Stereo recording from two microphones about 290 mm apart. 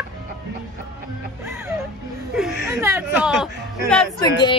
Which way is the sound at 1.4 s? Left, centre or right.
Centre.